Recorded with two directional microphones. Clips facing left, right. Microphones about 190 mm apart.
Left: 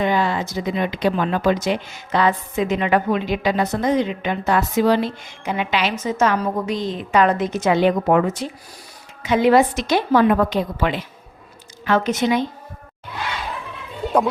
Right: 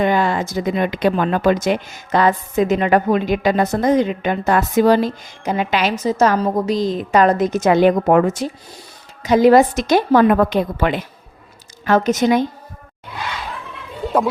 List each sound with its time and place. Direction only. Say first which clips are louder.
0.0 s speech: right 3 dB; 50° right (ahead or behind)
11.9 s speech: right 4 dB; 45° right (ahead or behind)